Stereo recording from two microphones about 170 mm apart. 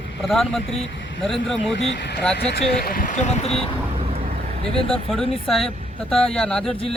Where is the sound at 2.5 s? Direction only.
60° left (ahead or behind).